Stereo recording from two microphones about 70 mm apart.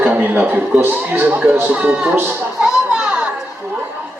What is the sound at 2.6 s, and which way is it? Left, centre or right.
Children playing, centre.